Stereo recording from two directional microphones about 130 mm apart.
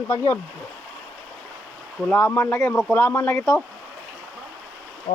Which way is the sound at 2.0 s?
10° left (ahead or behind).